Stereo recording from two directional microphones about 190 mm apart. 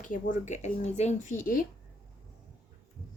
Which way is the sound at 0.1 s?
40° left (ahead or behind).